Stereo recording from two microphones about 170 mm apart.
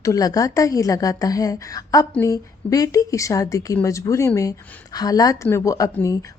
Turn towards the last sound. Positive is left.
turn(degrees=20)  # may be behind; listen again after turning